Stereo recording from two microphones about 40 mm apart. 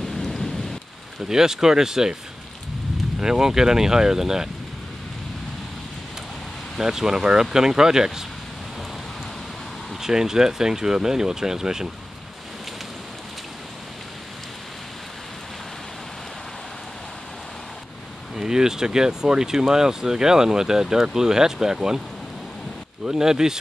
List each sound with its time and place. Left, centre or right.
0.0 s thunder: centre
1.3 s speech: centre
3.2 s speech: centre
6.8 s speech: centre
10.0 s speech: centre
18.3 s speech: centre
23.0 s speech: centre